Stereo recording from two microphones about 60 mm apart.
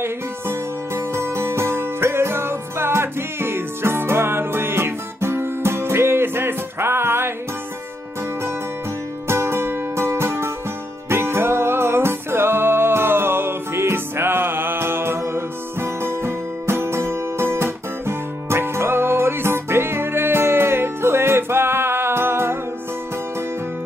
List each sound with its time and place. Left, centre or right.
0.0 s music: right
9.3 s music: right